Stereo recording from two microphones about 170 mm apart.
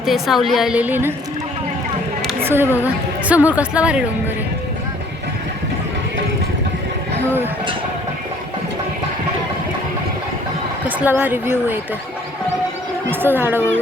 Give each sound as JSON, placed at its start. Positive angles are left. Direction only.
{"t": 0.0, "sound": "a woman's voice", "side_deg": 0}
{"t": 2.4, "sound": "a sound", "side_deg": -10}
{"t": 2.8, "sound": "a woman's voice", "side_deg": -10}
{"t": 10.8, "sound": "a woman's voice", "side_deg": -10}
{"t": 13.1, "sound": "a woman's voice", "side_deg": -10}